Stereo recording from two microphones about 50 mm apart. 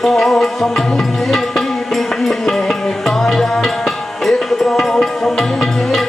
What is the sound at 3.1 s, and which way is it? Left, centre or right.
Music, centre.